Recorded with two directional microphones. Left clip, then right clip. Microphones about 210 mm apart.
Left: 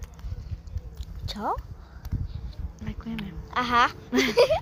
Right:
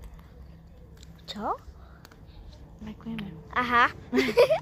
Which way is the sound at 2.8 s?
10° left (ahead or behind).